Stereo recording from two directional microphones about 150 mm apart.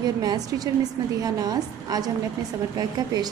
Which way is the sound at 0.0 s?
25° right (ahead or behind).